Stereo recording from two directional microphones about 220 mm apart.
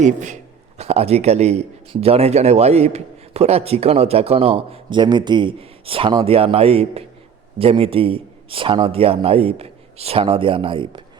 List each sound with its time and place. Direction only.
0.0 s a man's voice: 35° right (ahead or behind)